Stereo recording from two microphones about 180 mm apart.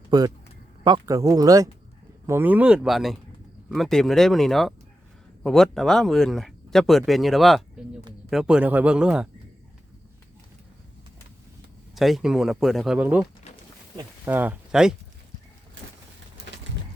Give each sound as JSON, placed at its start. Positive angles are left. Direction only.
{"t": 0.1, "sound": "speech", "side_deg": -25}
{"t": 11.9, "sound": "speech", "side_deg": 0}
{"t": 14.3, "sound": "speech", "side_deg": -10}